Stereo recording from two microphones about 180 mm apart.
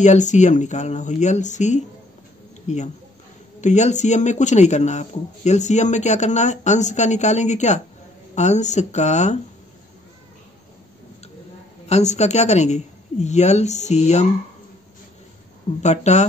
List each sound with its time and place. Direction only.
0.0 s speech: 40° left (ahead or behind)
11.9 s speech: 40° left (ahead or behind)
15.8 s speech: 40° left (ahead or behind)